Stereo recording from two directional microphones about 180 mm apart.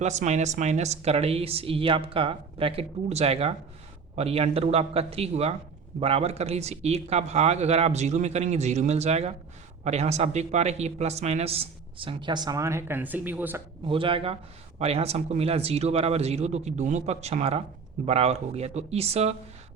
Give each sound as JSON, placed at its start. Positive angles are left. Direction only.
{"t": 0.0, "sound": "speech", "side_deg": -40}
{"t": 13.8, "sound": "speech", "side_deg": -30}